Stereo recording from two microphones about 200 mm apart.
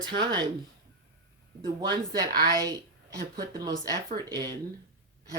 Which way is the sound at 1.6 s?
20° right (ahead or behind).